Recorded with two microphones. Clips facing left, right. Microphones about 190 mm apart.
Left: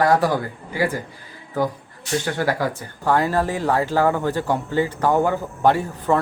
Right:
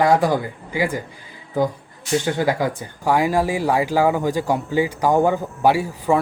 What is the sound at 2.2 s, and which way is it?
Speech, 15° right (ahead or behind).